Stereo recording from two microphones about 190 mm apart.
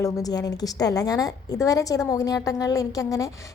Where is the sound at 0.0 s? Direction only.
20° left (ahead or behind).